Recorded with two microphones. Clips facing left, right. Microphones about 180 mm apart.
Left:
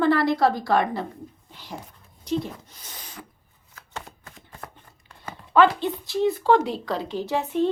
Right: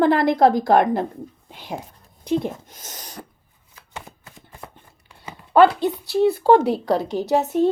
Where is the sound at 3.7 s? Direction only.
10° right (ahead or behind).